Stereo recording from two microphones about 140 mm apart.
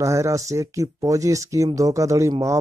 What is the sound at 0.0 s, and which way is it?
Speech, 20° right (ahead or behind).